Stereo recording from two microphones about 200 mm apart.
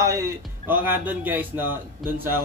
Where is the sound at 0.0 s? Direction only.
15° right (ahead or behind).